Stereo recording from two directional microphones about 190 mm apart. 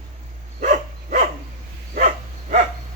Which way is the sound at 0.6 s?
40° right (ahead or behind).